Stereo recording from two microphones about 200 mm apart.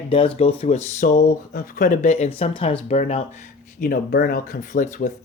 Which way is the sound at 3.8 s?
50° left (ahead or behind).